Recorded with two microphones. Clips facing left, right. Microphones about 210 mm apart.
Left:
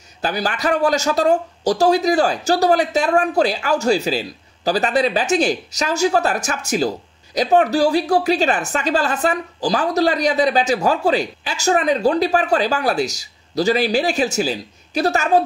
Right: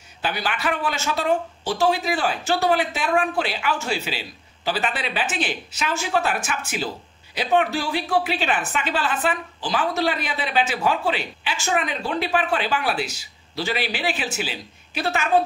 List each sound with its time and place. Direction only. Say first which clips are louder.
0.2 s a woman's voice: left 5 dB; 40° left (ahead or behind)